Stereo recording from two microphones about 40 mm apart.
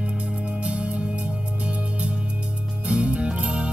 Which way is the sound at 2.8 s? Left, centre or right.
Right.